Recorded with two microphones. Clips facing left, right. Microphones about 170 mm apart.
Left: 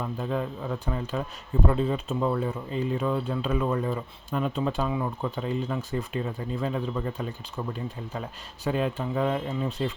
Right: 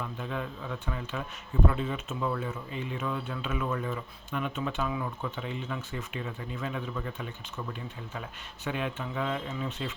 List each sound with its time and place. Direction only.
0.0 s speech: 35° left (ahead or behind)